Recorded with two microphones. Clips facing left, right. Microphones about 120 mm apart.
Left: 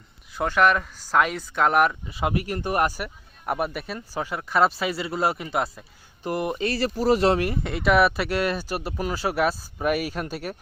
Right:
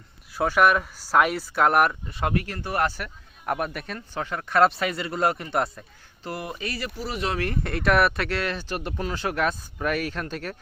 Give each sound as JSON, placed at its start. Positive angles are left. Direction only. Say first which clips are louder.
{"t": 0.3, "sound": "speech", "louder": "even", "side_deg": -10}
{"t": 2.3, "sound": "speech", "louder": "left 2 dB", "side_deg": 15}
{"t": 6.2, "sound": "speech", "louder": "left 7 dB", "side_deg": 20}
{"t": 7.3, "sound": "speech", "louder": "left 2 dB", "side_deg": 10}
{"t": 7.6, "sound": "speech", "louder": "even", "side_deg": 0}